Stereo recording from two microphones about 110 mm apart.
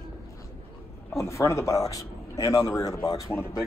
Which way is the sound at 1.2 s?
25° left (ahead or behind).